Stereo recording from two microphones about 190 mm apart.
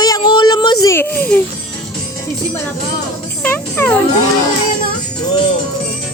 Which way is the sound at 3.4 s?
10° left (ahead or behind).